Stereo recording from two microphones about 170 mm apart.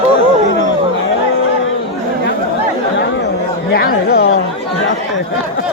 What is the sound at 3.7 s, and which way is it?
Chatter, 65° left (ahead or behind).